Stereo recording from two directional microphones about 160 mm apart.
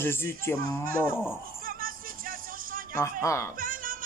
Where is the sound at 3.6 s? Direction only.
60° right (ahead or behind).